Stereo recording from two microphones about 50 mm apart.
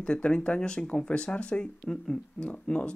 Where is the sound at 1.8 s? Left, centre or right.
Centre.